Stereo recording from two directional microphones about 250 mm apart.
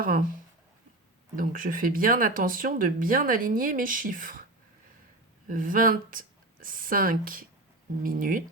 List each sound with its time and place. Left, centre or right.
0.0 s speech: right
1.4 s speech: right
5.5 s speech: right